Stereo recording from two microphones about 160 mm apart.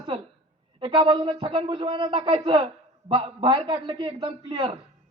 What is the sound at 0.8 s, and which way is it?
A man's voice, 30° right (ahead or behind).